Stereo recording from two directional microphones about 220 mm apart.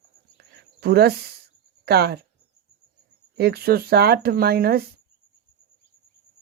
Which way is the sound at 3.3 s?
45° right (ahead or behind).